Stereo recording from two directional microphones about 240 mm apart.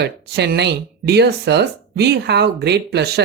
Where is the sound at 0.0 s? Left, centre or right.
Right.